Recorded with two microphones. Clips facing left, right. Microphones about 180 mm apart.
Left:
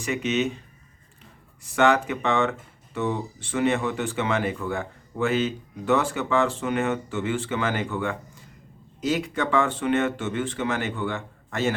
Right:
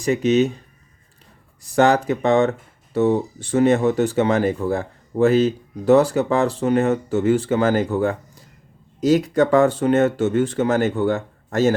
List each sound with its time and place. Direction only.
0.0 s speech: 40° right (ahead or behind)
1.6 s speech: 35° right (ahead or behind)